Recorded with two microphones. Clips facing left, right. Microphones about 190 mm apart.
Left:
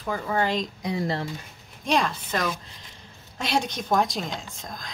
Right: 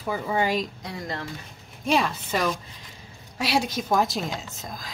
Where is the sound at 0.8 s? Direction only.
25° left (ahead or behind).